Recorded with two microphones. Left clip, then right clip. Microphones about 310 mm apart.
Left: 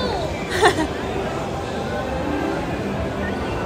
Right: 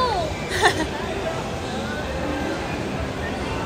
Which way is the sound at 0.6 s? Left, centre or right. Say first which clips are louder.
Left 3 dB; centre.